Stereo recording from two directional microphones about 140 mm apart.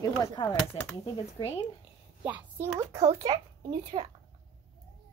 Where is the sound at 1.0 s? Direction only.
50° left (ahead or behind).